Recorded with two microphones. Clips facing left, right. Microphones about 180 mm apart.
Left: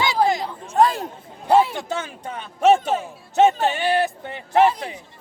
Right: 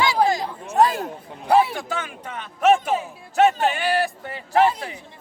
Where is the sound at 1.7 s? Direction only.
30° left (ahead or behind).